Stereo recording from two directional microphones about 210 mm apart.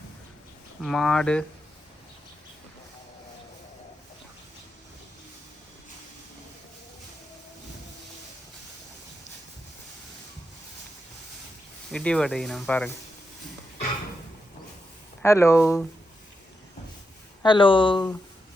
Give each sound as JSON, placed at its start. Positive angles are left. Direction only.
{"t": 0.8, "sound": "speech", "side_deg": 0}
{"t": 11.9, "sound": "speech", "side_deg": 5}
{"t": 15.2, "sound": "speech", "side_deg": 15}
{"t": 17.4, "sound": "speech", "side_deg": 25}